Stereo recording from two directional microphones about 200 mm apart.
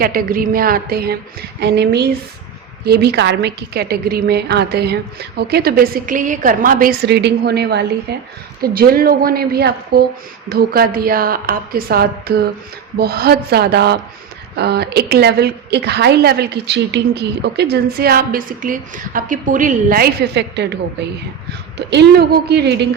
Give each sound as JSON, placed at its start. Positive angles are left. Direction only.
{"t": 0.0, "sound": "a woman's voice", "side_deg": -45}